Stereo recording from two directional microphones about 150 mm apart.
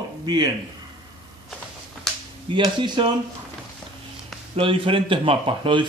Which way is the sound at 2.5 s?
30° right (ahead or behind).